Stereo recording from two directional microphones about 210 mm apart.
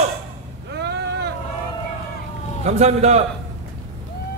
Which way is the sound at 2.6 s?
30° right (ahead or behind).